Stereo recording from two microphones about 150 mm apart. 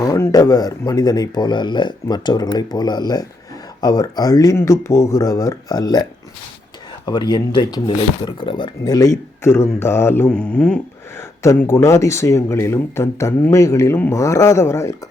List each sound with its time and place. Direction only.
0.0 s speech: 25° left (ahead or behind); by 10.8 s 5° left (ahead or behind)
11.2 s speech: 15° left (ahead or behind)